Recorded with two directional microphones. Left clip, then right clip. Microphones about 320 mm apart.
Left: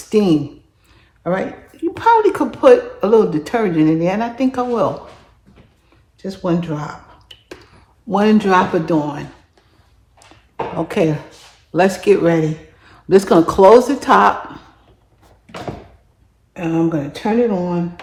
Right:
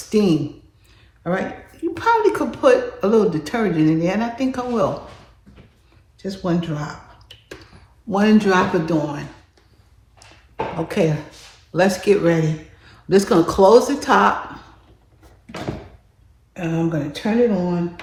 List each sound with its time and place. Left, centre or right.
0.1 s speech: left
6.1 s speech: left
8.1 s speech: left
10.8 s speech: left
16.6 s speech: left